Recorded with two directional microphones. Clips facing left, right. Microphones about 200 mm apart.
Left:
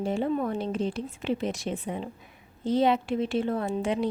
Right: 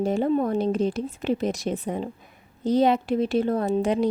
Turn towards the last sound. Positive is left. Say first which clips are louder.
# right 5 dB
turn(degrees=-40)  # may be behind; listen again after turning